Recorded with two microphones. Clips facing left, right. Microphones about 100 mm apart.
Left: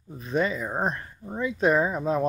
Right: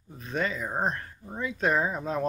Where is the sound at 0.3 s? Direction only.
10° left (ahead or behind).